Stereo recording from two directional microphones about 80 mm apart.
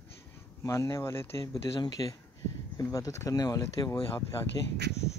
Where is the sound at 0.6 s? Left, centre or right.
Left.